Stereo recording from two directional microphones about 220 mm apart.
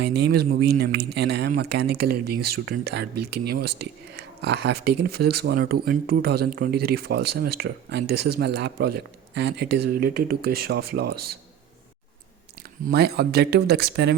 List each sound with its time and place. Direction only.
0.0 s speech: 50° right (ahead or behind)
12.9 s speech: 45° right (ahead or behind)